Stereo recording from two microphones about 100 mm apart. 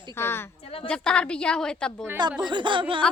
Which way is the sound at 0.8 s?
10° left (ahead or behind).